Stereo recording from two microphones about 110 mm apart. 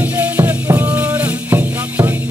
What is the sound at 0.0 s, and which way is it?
Music, 15° right (ahead or behind).